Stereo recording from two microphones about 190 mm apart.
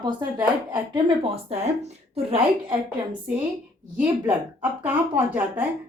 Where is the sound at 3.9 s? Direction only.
10° right (ahead or behind).